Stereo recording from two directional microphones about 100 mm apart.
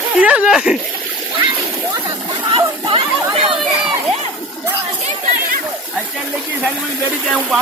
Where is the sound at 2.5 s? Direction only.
65° right (ahead or behind).